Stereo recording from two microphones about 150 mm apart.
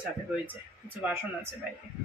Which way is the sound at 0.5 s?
10° right (ahead or behind).